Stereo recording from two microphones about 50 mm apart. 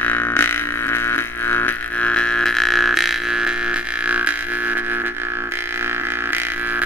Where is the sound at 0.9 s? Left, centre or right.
Left.